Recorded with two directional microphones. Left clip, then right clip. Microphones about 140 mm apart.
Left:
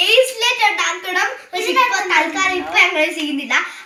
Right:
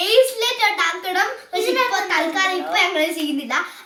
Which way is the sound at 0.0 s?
5° right (ahead or behind).